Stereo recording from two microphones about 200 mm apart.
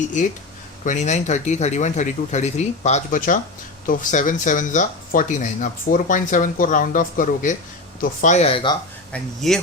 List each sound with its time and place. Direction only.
0.9 s speech: 35° left (ahead or behind)
9.1 s speech: centre (ahead or behind)